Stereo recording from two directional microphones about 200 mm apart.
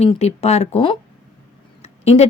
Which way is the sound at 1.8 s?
30° left (ahead or behind).